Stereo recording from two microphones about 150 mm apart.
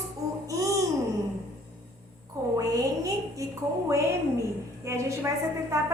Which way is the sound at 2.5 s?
20° right (ahead or behind).